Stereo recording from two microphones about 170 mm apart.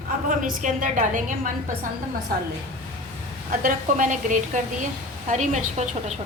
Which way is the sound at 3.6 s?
50° right (ahead or behind).